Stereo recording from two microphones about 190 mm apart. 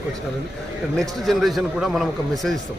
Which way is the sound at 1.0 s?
Centre (ahead or behind).